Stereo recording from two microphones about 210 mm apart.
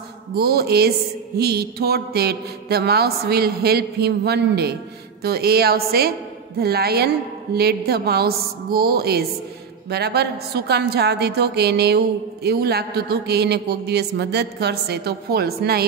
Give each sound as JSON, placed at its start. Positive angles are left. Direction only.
{"t": 0.3, "sound": "mantra", "side_deg": -45}